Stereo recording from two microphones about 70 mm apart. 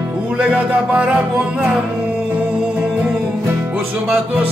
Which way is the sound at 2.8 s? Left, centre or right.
Centre.